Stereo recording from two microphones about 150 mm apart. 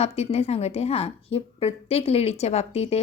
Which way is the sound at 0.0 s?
45° left (ahead or behind).